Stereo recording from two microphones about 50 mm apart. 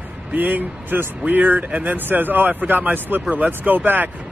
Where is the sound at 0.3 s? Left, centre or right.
Right.